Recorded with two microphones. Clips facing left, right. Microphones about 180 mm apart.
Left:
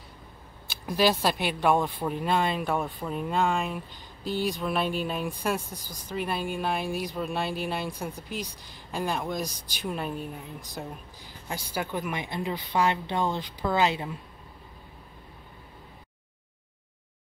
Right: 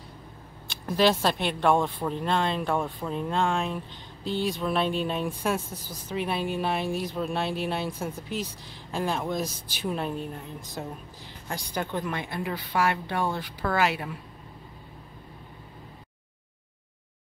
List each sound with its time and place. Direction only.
0.7 s speech: 5° left (ahead or behind); by 14.1 s 20° left (ahead or behind)